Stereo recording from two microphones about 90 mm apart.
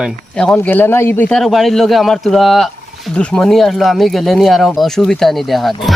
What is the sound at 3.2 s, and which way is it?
Speech, 10° left (ahead or behind).